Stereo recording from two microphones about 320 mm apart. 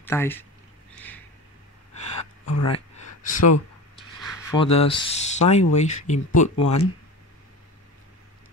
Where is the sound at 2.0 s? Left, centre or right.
Left.